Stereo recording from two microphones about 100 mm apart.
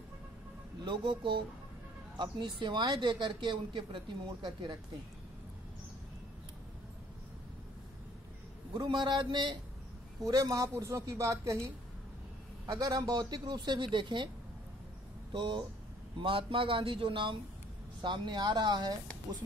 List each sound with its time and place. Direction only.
0.8 s speech: 50° right (ahead or behind)
8.7 s speech: 50° right (ahead or behind)
10.2 s a woman's voice: 35° right (ahead or behind)
15.3 s speech: 55° right (ahead or behind)